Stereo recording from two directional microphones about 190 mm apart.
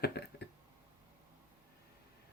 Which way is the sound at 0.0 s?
55° left (ahead or behind).